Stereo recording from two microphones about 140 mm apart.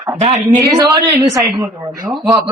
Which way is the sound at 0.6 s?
25° right (ahead or behind).